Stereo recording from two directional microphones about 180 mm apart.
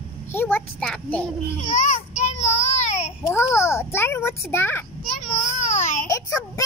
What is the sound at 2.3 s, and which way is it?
Child singing, 40° left (ahead or behind).